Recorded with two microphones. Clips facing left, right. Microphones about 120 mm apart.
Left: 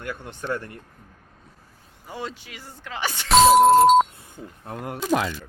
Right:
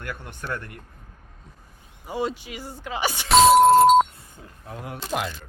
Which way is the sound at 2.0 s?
15° right (ahead or behind).